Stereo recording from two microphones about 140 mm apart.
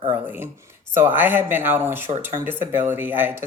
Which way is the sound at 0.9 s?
15° right (ahead or behind).